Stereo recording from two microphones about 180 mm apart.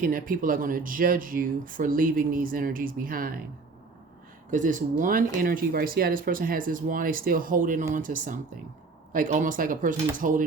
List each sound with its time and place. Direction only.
0.0 s speech: 50° right (ahead or behind)
4.5 s speech: 45° right (ahead or behind)